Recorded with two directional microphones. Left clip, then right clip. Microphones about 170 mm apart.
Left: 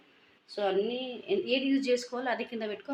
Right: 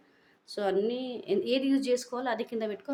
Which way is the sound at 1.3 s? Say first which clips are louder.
Right 1 dB; 20° right (ahead or behind).